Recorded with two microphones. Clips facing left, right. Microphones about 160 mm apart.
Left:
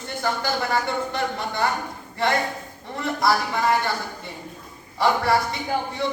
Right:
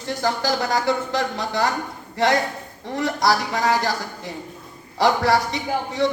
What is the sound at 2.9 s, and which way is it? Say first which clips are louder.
A man's voice: right 2 dB; 80° right.